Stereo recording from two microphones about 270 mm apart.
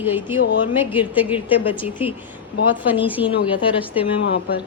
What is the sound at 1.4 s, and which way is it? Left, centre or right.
Speech, centre.